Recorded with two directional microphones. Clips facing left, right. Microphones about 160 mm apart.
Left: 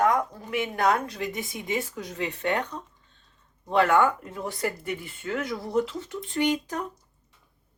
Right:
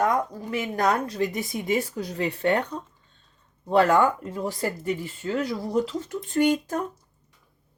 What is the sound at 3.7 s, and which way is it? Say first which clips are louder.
Speech: right 2 dB; 35° right (ahead or behind).